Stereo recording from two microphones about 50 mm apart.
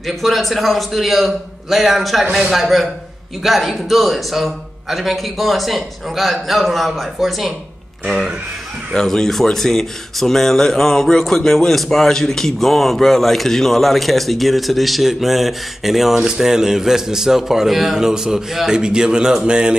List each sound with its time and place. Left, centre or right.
0.0 s a man's voice: centre
8.9 s a man's voice: centre